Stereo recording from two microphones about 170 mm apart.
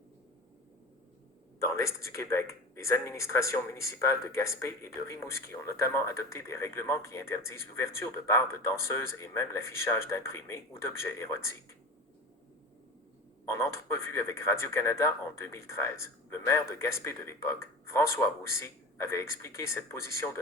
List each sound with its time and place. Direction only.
1.5 s speech: 15° left (ahead or behind)
13.5 s speech: 15° left (ahead or behind)